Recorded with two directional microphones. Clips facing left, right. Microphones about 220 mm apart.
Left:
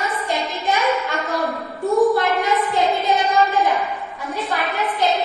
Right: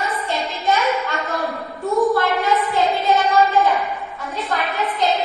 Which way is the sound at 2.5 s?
Centre (ahead or behind).